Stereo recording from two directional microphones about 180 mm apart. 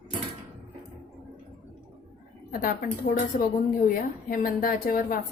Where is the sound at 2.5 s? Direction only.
50° left (ahead or behind).